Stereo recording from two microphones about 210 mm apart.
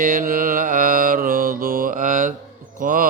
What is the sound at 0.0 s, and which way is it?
Mantra, 40° right (ahead or behind).